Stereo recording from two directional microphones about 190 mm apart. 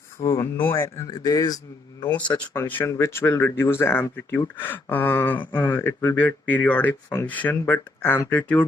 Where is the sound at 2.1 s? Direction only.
5° left (ahead or behind).